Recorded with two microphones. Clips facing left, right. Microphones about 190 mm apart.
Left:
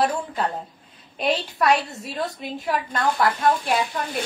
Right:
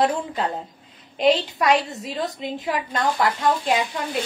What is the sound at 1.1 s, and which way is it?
A woman's voice, 15° right (ahead or behind).